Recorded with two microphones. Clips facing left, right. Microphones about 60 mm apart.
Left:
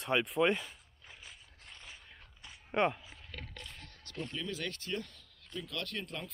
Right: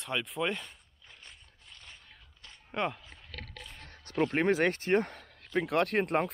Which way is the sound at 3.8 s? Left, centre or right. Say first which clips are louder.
Right 3 dB; right.